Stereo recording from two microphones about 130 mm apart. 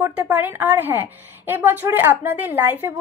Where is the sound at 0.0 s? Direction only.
15° right (ahead or behind).